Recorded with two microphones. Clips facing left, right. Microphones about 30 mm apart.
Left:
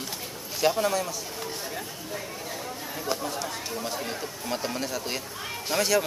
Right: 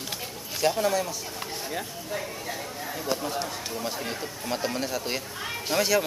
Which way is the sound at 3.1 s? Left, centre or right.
Centre.